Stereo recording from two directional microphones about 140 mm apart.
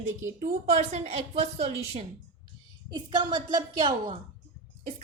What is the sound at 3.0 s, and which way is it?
Speech, 35° right (ahead or behind).